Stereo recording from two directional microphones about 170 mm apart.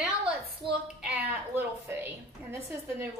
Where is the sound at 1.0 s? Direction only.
10° right (ahead or behind).